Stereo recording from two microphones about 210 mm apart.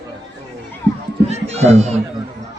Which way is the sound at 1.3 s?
30° right (ahead or behind).